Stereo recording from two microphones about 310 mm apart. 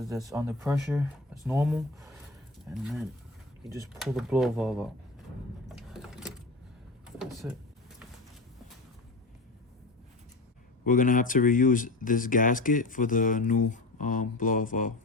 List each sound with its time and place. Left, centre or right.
0.1 s speech: centre
5.6 s a sound: centre
10.8 s speech: left